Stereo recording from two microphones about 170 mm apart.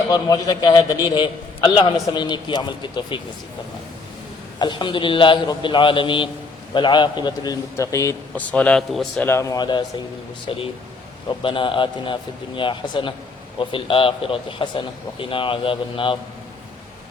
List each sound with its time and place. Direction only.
0.1 s a man's voice: 20° left (ahead or behind)
4.6 s a man's voice: 30° left (ahead or behind); by 9.2 s centre (ahead or behind)
9.2 s a man's voice: 15° left (ahead or behind)